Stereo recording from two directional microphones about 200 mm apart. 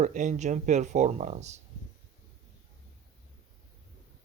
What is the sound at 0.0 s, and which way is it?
Speech, 40° right (ahead or behind).